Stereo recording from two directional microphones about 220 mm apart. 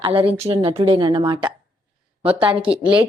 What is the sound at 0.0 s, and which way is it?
A woman's voice, 25° right (ahead or behind).